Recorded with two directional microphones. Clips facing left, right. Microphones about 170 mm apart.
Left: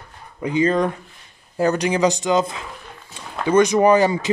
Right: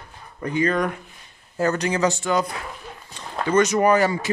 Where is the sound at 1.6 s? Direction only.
15° left (ahead or behind).